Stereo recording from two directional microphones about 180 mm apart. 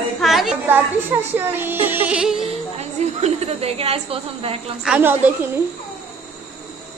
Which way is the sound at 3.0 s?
35° right (ahead or behind).